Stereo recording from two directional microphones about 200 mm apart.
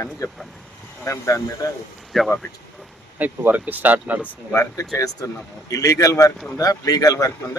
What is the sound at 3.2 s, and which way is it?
Speech, 10° right (ahead or behind).